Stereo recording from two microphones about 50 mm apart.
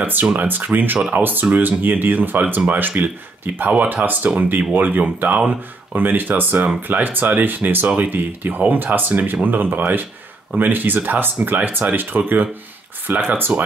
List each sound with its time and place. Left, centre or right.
0.0 s speech: right